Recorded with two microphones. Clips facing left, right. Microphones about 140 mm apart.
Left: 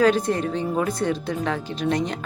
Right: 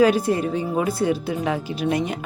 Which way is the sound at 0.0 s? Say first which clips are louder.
Right 2 dB; 10° right (ahead or behind).